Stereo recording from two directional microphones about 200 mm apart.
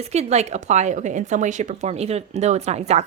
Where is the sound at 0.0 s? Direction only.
35° right (ahead or behind).